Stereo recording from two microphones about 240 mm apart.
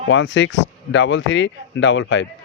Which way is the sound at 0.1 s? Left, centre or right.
Left.